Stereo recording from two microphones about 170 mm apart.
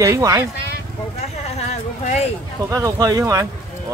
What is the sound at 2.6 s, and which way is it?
Speech, 20° right (ahead or behind).